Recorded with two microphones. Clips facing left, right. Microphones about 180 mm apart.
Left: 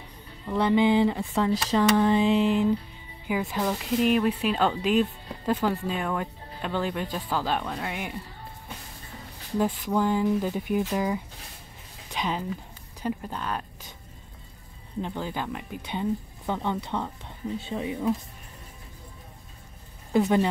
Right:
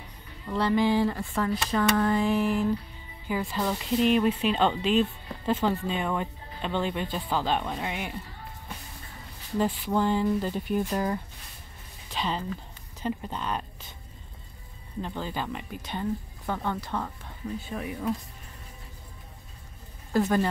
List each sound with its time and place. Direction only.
0.6 s a sound: 20° left (ahead or behind)
3.4 s speech: 10° left (ahead or behind)
7.6 s speech: 10° right (ahead or behind)
7.9 s speech: 5° left (ahead or behind)
9.9 s speech: 10° left (ahead or behind)
15.0 s speech: 15° left (ahead or behind)
15.4 s speech: 5° left (ahead or behind)
15.9 s a woman's voice: 15° left (ahead or behind)
17.6 s a sound: 25° left (ahead or behind)
20.1 s speech: 15° left (ahead or behind)